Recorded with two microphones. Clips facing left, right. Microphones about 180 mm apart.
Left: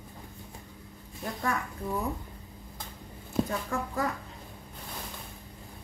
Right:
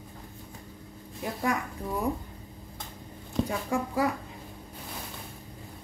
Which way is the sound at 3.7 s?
10° right (ahead or behind).